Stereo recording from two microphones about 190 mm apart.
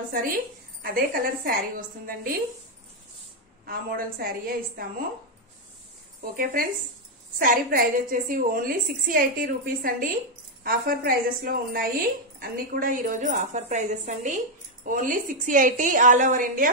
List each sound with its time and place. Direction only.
0.1 s a woman's voice: 50° right (ahead or behind)
3.6 s a woman's voice: 50° right (ahead or behind)
6.3 s a woman's voice: 50° right (ahead or behind)